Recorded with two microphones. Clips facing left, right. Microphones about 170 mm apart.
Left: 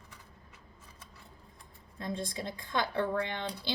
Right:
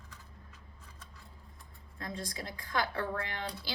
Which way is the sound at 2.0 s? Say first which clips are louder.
Left 4 dB; 25° left (ahead or behind).